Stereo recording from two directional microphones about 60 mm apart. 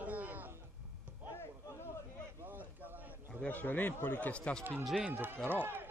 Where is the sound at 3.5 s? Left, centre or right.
Left.